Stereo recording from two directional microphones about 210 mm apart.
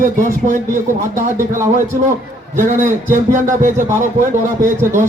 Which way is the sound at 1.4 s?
15° right (ahead or behind).